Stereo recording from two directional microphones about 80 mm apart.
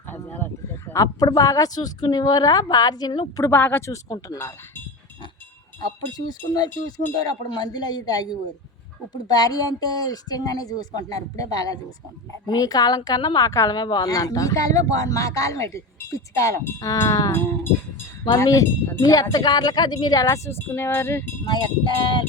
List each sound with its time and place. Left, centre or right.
0.1 s a sound: left
0.9 s speech: left
3.5 s speech: left
3.8 s speech: left
6.1 s speech: left
17.3 s speech: left
20.2 s speech: left
21.4 s cowbell: left